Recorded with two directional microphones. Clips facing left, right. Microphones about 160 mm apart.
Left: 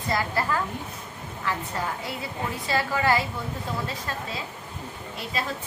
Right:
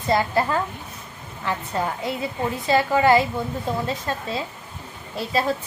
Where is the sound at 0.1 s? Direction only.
25° right (ahead or behind).